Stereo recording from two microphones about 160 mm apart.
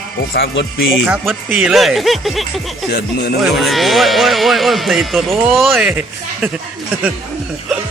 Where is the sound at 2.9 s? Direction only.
75° left (ahead or behind).